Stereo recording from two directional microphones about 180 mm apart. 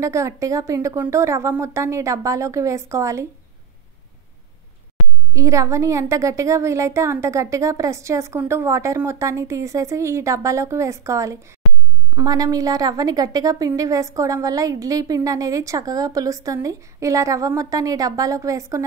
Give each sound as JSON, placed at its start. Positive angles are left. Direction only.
{"t": 0.0, "sound": "a woman's voice", "side_deg": -15}
{"t": 5.3, "sound": "a woman's voice", "side_deg": -15}